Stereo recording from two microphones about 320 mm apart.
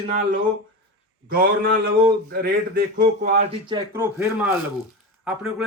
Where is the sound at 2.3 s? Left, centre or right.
Right.